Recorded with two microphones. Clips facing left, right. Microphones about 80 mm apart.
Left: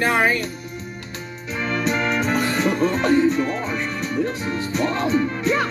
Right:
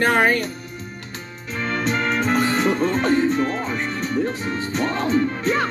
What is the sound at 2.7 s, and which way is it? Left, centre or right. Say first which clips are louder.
Speech: even; centre.